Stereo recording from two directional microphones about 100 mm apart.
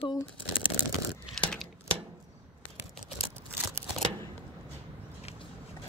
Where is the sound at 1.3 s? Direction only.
5° left (ahead or behind).